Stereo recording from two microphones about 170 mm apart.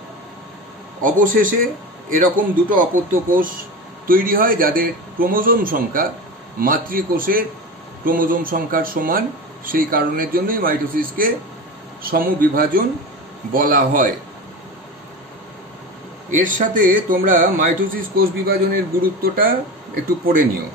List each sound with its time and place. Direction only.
1.0 s a man's voice: 50° right (ahead or behind)
16.3 s a man's voice: 50° right (ahead or behind)